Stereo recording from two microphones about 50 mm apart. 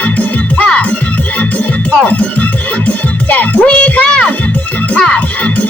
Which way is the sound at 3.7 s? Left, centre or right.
Left.